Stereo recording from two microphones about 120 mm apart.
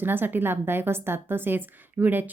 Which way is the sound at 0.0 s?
15° right (ahead or behind).